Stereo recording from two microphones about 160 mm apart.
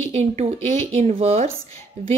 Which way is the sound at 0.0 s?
45° right (ahead or behind).